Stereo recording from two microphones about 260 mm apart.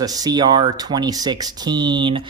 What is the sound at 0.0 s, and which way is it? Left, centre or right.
Speech, centre.